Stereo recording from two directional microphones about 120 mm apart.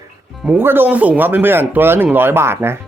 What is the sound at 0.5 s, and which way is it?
Speech, 15° right (ahead or behind).